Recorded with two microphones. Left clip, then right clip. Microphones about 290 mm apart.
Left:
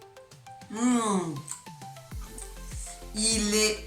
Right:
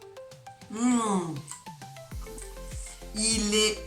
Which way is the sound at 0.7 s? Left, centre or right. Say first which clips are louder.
Even; centre.